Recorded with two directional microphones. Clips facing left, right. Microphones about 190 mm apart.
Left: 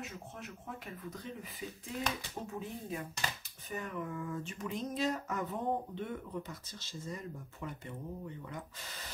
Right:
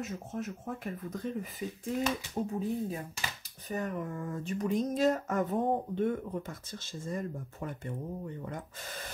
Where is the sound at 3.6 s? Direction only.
40° right (ahead or behind).